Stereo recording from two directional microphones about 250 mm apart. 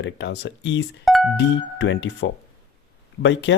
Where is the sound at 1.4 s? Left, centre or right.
Left.